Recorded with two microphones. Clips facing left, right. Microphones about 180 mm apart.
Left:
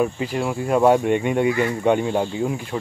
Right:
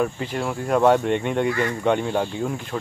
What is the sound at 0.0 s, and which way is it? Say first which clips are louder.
Speech: left 2 dB; 10° left (ahead or behind).